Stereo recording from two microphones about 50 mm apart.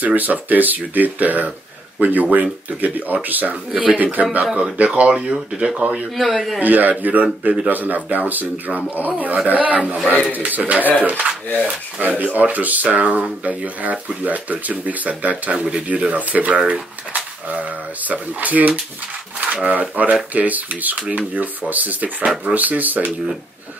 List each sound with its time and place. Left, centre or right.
0.0 s speech: right
3.7 s speech: right
6.1 s speech: centre
6.6 s speech: right
11.6 s speech: right